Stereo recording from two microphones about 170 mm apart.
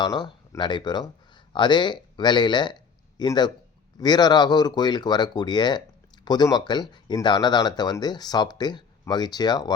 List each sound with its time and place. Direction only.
0.0 s speech: 25° left (ahead or behind)